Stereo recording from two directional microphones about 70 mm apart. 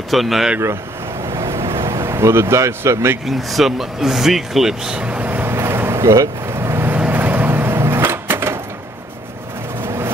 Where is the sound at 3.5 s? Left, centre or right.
Centre.